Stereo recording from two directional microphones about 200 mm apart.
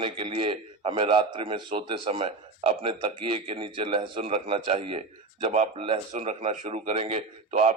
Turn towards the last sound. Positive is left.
turn(degrees=-30)  # may be behind; listen again after turning